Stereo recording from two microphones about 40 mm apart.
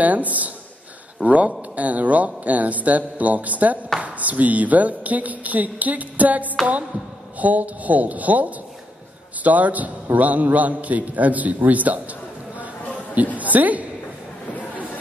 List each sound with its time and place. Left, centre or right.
0.0 s speech: right
13.4 s a woman's voice: right